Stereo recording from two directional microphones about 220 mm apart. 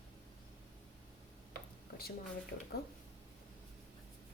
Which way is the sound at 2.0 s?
45° left (ahead or behind).